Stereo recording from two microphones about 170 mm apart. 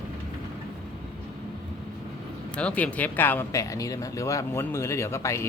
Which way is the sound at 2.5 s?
5° left (ahead or behind).